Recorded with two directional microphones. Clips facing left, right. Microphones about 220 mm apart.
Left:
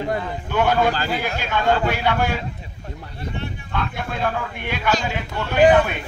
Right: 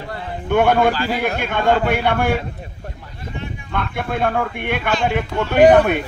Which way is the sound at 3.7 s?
55° right (ahead or behind).